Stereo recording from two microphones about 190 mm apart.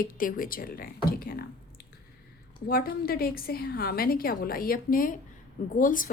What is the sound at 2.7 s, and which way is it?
A woman's voice, 50° left (ahead or behind).